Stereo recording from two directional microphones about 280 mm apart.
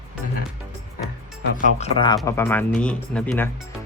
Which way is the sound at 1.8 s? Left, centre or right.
Centre.